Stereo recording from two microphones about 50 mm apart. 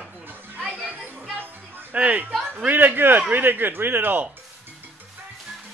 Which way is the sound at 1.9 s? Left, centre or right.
Right.